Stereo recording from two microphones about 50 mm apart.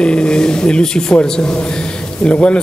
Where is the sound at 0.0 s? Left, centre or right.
Centre.